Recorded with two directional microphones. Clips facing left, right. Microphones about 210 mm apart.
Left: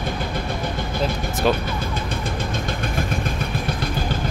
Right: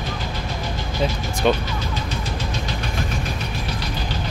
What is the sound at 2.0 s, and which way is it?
Vehicle, 50° left (ahead or behind).